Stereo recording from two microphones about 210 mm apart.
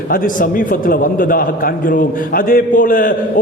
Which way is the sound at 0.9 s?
40° left (ahead or behind).